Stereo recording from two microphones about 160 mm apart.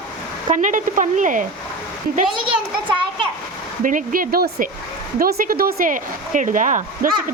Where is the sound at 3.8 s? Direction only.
55° right (ahead or behind).